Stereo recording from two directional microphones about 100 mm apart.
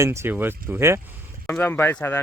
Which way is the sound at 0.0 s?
30° right (ahead or behind).